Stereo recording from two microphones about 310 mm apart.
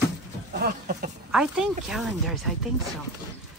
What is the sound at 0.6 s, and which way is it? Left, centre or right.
Speech, right.